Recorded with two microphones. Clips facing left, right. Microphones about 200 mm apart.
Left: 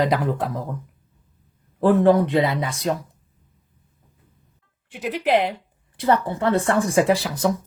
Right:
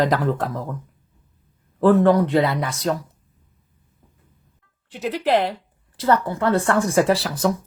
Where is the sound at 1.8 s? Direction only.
25° left (ahead or behind).